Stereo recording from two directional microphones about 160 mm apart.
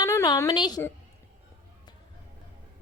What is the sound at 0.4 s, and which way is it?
Speech, 30° left (ahead or behind).